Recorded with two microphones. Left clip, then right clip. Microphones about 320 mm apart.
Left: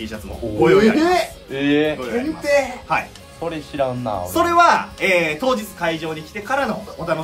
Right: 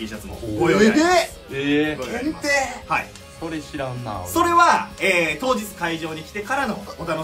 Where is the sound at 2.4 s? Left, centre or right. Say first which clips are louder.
Left 4 dB; right.